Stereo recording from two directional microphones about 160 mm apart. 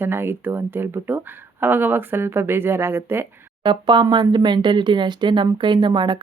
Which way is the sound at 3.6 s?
30° right (ahead or behind).